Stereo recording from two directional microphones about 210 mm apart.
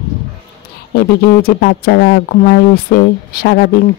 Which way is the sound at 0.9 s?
45° left (ahead or behind).